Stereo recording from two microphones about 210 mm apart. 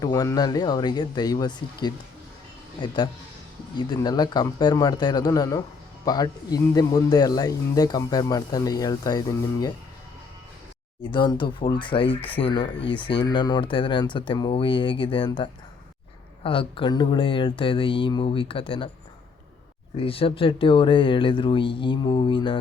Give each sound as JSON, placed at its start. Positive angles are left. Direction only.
{"t": 0.0, "sound": "speech", "side_deg": 15}
{"t": 11.0, "sound": "speech", "side_deg": 20}
{"t": 20.0, "sound": "speech", "side_deg": 25}